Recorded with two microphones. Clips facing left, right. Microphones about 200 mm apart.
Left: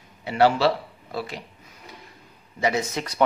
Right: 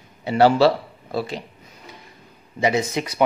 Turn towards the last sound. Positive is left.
turn(degrees=-15)  # may be behind; listen again after turning